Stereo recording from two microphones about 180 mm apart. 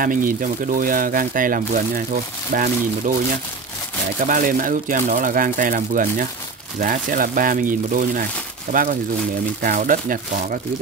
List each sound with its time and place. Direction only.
0.0 s speech: 50° right (ahead or behind)
4.2 s speech: 50° right (ahead or behind)